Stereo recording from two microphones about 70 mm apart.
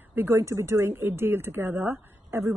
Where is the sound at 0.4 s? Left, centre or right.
Right.